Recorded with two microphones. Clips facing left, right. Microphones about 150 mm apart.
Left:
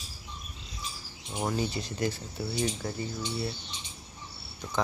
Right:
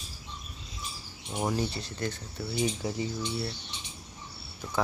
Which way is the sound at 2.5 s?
10° right (ahead or behind).